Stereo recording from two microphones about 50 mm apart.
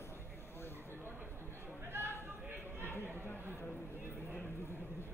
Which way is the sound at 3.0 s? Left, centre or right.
Right.